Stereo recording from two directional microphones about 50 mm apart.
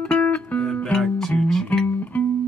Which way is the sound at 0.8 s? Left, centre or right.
Centre.